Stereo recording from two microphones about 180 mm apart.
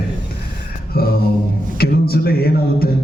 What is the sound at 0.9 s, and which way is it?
A man's voice, 60° left (ahead or behind).